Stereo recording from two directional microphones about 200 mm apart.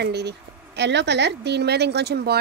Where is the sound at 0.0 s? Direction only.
55° right (ahead or behind).